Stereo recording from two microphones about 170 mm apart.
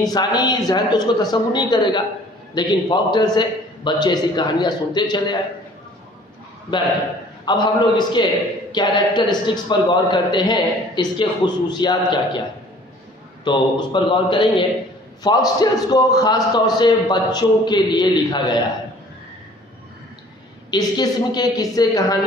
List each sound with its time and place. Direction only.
0.0 s a man's voice: 25° left (ahead or behind)
7.4 s a man's voice: 25° left (ahead or behind)
13.4 s a man's voice: 25° left (ahead or behind)
20.7 s a man's voice: 25° left (ahead or behind)